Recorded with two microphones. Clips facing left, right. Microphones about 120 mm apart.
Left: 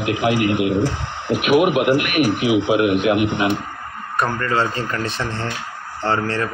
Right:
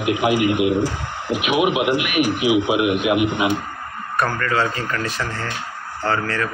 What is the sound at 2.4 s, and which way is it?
Speech, 35° left (ahead or behind).